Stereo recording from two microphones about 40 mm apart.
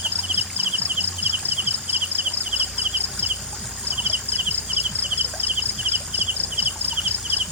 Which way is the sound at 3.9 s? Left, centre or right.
Right.